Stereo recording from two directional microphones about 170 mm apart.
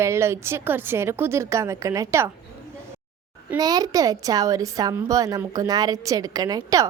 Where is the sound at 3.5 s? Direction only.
20° right (ahead or behind).